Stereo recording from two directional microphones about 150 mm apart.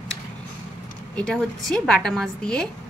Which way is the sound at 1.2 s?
5° left (ahead or behind).